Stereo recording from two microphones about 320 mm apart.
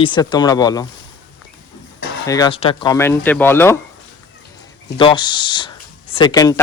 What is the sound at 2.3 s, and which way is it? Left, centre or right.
Speech, centre.